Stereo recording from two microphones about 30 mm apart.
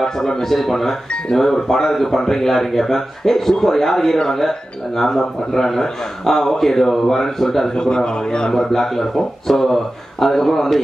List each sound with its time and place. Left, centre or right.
0.0 s speech: centre
7.7 s a man's voice: left
8.5 s speech: centre